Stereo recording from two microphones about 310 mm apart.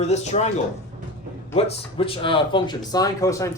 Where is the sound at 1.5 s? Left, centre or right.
Centre.